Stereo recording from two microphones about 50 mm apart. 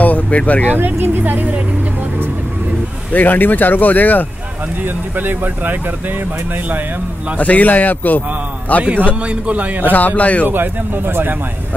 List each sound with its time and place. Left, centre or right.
0.0 s speech: left
0.7 s speech: right
3.1 s speech: left
4.8 s speech: right
7.3 s speech: left
8.9 s a man's voice: right
9.8 s speech: left
10.5 s speech: right